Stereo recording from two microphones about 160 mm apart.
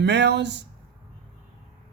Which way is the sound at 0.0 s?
90° right.